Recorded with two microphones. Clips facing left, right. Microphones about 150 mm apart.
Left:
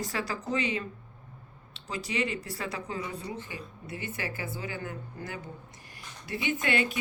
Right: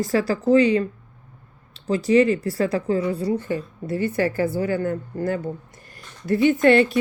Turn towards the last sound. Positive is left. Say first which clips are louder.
# right 13 dB
turn(degrees=-45)  # may be behind; listen again after turning